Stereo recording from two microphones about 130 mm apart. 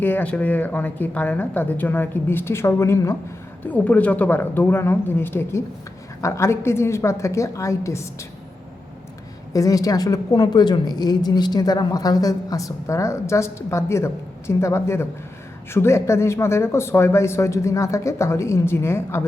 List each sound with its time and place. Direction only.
0.0 s a woman's voice: 15° left (ahead or behind)
9.5 s a woman's voice: 25° left (ahead or behind)